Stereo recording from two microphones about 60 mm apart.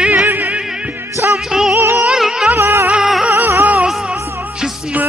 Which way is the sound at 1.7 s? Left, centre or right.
Right.